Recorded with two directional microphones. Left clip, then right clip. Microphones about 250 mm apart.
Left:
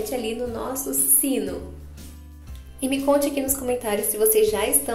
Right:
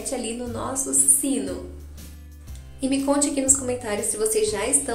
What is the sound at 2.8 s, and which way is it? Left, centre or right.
A woman's voice, centre.